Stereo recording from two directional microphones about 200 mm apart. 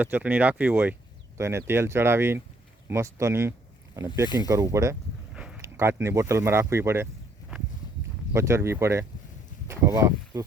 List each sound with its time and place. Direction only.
0.0 s speech: 10° right (ahead or behind)
5.3 s a sound: 5° right (ahead or behind)
5.6 s speech: 15° right (ahead or behind)
8.3 s speech: 15° right (ahead or behind)